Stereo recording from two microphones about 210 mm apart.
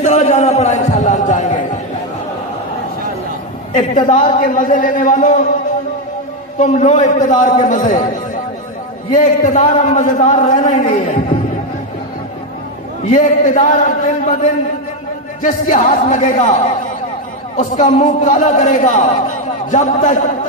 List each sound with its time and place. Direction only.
0.0 s a sound: 30° left (ahead or behind)
3.7 s a man's voice: 35° left (ahead or behind)
6.6 s a man's voice: 35° left (ahead or behind)
9.1 s a man's voice: 35° left (ahead or behind)
13.0 s a man's voice: 35° left (ahead or behind)